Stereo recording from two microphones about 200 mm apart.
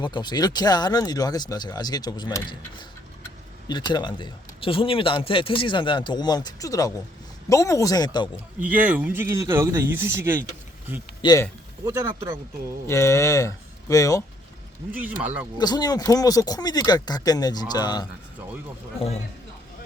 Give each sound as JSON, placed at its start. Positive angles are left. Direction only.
{"t": 0.0, "sound": "speech", "side_deg": 20}
{"t": 8.6, "sound": "speech", "side_deg": -10}
{"t": 11.2, "sound": "speech", "side_deg": 20}
{"t": 11.9, "sound": "speech", "side_deg": -15}
{"t": 12.9, "sound": "speech", "side_deg": 15}
{"t": 14.9, "sound": "speech", "side_deg": -10}
{"t": 15.5, "sound": "speech", "side_deg": 20}
{"t": 18.9, "sound": "speech", "side_deg": 30}